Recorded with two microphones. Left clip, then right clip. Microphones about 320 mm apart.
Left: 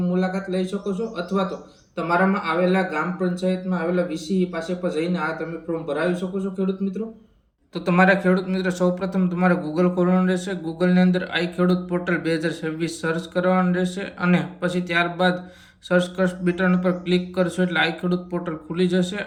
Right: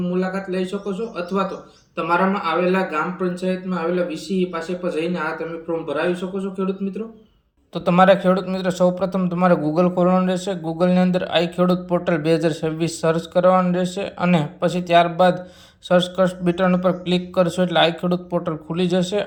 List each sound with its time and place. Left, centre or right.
0.1 s speech: centre
7.9 s speech: centre